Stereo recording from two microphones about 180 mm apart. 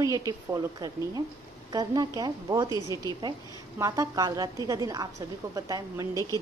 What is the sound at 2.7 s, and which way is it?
Speech, 20° left (ahead or behind).